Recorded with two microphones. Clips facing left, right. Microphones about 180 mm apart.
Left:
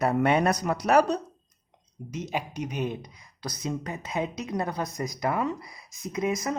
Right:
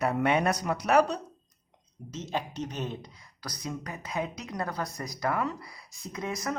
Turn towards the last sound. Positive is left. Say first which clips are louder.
# left 6 dB
turn(degrees=20)  # may be behind; listen again after turning